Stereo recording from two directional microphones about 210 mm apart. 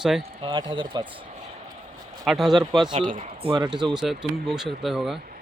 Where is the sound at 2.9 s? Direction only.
35° right (ahead or behind).